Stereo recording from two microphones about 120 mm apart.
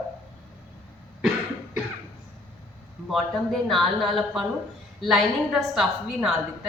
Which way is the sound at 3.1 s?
Centre (ahead or behind).